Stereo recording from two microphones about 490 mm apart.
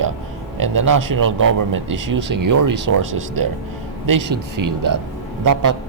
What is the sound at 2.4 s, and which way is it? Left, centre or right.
Speech, right.